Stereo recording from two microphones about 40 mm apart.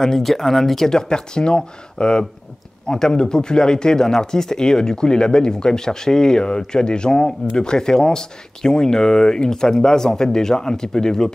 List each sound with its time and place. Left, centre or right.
0.0 s speech: centre